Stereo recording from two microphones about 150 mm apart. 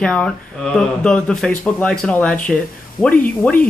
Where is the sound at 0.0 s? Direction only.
10° left (ahead or behind).